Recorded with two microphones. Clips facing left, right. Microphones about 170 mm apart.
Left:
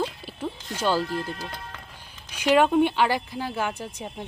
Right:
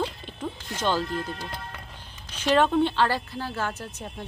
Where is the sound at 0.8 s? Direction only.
10° left (ahead or behind).